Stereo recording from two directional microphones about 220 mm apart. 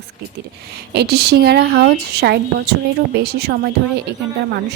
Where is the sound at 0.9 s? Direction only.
45° right (ahead or behind).